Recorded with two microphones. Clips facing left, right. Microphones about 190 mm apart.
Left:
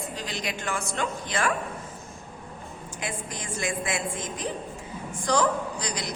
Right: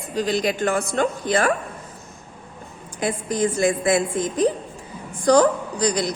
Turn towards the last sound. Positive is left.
turn(degrees=-35)  # may be behind; listen again after turning